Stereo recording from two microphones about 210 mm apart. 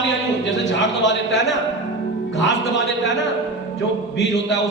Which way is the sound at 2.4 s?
60° left (ahead or behind).